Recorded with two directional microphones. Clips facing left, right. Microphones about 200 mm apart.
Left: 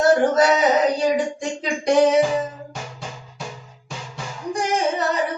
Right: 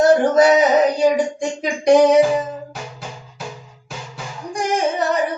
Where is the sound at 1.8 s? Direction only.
15° right (ahead or behind).